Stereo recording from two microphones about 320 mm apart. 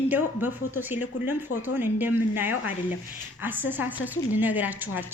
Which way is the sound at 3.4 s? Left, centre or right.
Centre.